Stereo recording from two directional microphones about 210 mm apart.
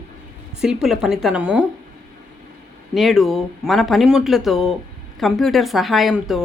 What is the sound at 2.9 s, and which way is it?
Speech, centre (ahead or behind).